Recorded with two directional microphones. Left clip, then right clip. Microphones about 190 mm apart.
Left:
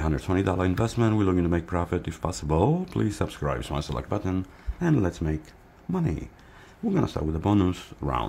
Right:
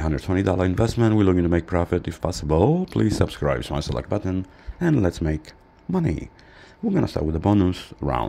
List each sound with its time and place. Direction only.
0.0 s speech: 15° right (ahead or behind)